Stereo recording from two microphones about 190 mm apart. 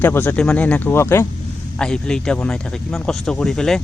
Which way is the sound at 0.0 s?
10° left (ahead or behind).